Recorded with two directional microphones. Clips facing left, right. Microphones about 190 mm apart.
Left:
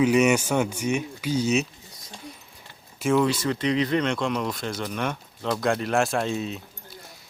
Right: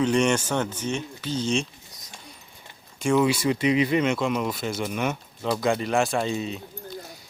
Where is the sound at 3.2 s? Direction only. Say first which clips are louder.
Right 2 dB; 10° right (ahead or behind).